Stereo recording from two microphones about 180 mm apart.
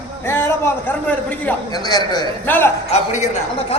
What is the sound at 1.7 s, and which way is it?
Speech, 20° left (ahead or behind).